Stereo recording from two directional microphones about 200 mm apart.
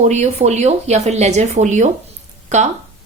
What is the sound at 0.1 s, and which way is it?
Speech, 35° right (ahead or behind).